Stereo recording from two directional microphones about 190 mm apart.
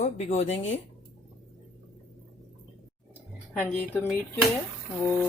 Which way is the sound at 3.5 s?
5° left (ahead or behind).